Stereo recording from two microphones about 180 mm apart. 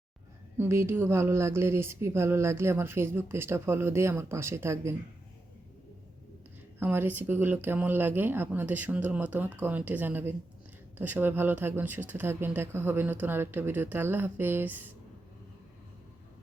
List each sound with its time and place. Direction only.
0.5 s speech: 15° right (ahead or behind)
6.7 s speech: 10° right (ahead or behind)